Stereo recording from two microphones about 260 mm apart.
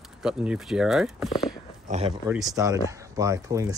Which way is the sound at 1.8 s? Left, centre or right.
Right.